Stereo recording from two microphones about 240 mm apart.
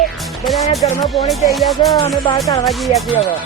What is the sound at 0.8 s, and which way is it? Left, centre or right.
Speech, left.